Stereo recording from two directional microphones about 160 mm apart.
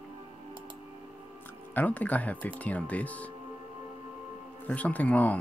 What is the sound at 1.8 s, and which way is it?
Speech, 10° left (ahead or behind).